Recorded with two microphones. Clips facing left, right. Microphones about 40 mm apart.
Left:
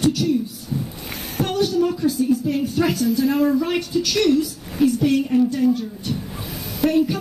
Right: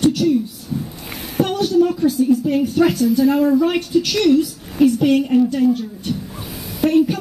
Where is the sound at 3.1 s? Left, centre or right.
Centre.